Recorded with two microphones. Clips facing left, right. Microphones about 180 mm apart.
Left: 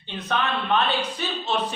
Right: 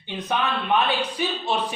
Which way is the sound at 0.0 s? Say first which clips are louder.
Right 1 dB; 15° right (ahead or behind).